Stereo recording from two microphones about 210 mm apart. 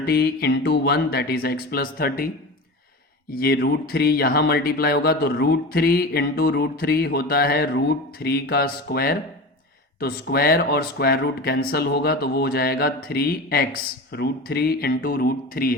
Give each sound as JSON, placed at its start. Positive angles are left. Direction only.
{"t": 0.0, "sound": "speech", "side_deg": 50}